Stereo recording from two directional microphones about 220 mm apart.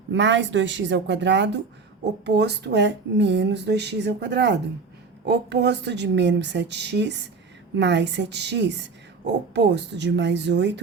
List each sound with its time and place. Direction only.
0.1 s a woman's voice: 55° right (ahead or behind)